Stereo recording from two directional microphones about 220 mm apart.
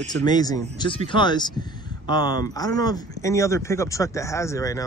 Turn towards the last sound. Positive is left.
turn(degrees=15)  # may be behind; listen again after turning